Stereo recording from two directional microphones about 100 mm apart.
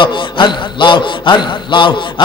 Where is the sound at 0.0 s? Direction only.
50° left (ahead or behind).